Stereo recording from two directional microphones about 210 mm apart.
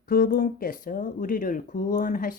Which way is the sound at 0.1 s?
45° left (ahead or behind).